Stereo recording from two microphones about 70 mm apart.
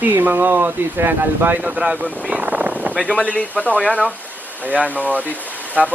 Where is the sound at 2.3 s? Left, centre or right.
Right.